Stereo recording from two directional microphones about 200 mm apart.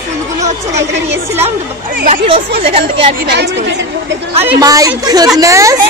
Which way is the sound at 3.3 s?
60° right (ahead or behind).